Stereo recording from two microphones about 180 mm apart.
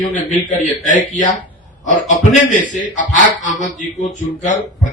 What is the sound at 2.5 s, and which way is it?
A man's voice, 45° left (ahead or behind).